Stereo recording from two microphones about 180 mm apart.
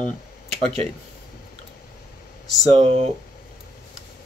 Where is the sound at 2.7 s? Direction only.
35° right (ahead or behind).